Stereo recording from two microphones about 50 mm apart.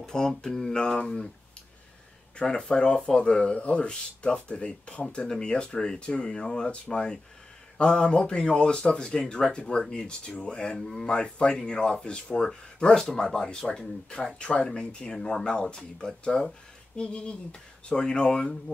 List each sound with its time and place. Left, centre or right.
0.0 s speech: centre
2.3 s speech: centre